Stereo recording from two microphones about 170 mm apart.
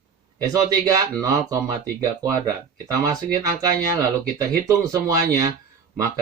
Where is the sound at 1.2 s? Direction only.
20° right (ahead or behind).